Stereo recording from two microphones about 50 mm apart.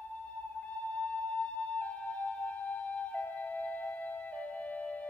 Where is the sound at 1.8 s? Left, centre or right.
Left.